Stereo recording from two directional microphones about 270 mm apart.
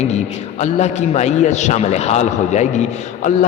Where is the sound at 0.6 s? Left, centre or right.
Left.